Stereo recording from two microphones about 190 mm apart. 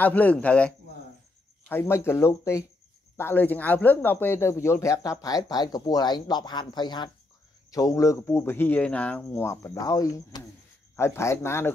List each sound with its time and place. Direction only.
0.0 s speech: 10° left (ahead or behind)